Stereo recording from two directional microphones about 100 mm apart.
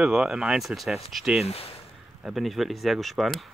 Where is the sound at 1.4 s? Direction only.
90° left.